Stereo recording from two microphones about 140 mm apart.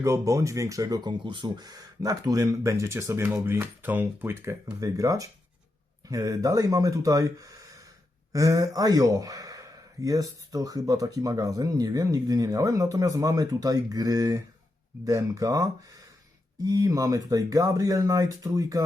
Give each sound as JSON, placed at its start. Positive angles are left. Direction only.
{"t": 0.0, "sound": "speech", "side_deg": -20}